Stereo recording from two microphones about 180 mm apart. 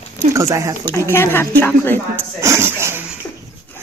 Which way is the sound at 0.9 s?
15° left (ahead or behind).